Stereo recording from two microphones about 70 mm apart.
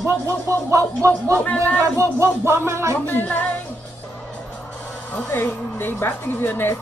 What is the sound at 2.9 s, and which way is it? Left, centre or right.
Speech, left.